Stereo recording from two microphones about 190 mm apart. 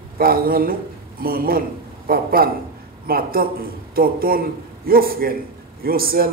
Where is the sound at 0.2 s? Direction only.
50° right (ahead or behind).